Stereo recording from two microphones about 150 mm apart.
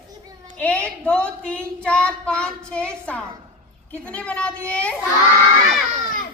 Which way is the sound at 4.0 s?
10° left (ahead or behind).